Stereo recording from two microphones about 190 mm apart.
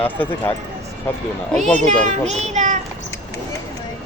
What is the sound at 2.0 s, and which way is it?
Speech, 35° right (ahead or behind).